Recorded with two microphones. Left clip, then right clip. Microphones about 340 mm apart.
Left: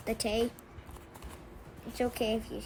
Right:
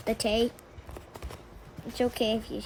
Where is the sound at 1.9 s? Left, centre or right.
Right.